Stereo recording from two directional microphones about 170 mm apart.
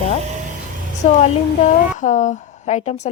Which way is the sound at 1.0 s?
45° left (ahead or behind).